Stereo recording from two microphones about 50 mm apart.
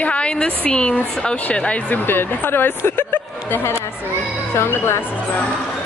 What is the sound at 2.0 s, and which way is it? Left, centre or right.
Speech, left.